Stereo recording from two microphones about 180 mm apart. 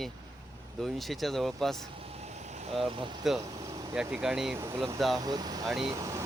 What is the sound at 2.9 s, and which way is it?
Speech, 25° right (ahead or behind).